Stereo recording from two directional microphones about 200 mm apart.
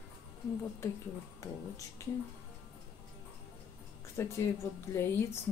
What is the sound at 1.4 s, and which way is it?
Speech, 15° left (ahead or behind).